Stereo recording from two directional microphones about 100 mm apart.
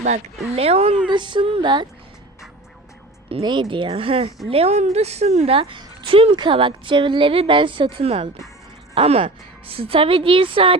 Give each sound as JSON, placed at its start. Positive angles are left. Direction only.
{"t": 0.5, "sound": "speech", "side_deg": -90}
{"t": 1.0, "sound": "speech", "side_deg": -50}
{"t": 3.4, "sound": "a woman's voice", "side_deg": -50}
{"t": 9.0, "sound": "a woman's voice", "side_deg": -80}